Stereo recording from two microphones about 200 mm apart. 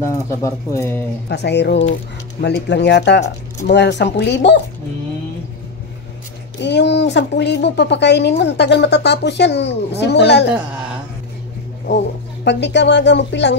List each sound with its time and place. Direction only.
0.3 s speech: 15° left (ahead or behind)
1.3 s a woman's voice: 60° left (ahead or behind)
6.6 s a woman's voice: 60° left (ahead or behind)
12.4 s a woman's voice: 60° left (ahead or behind)